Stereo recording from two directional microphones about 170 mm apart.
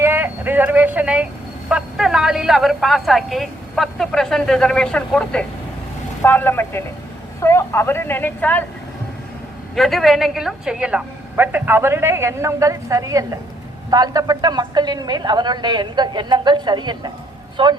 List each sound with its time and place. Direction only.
0.0 s a sound: 15° right (ahead or behind)
1.7 s a woman's voice: centre (ahead or behind)
9.7 s a woman's voice: centre (ahead or behind); by 17.7 s 30° right (ahead or behind)